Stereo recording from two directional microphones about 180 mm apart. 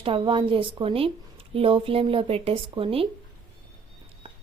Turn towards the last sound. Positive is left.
turn(degrees=-30)  # may be behind; listen again after turning